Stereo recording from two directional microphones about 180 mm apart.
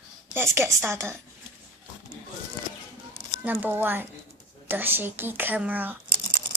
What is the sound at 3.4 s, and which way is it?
Speech, 10° right (ahead or behind).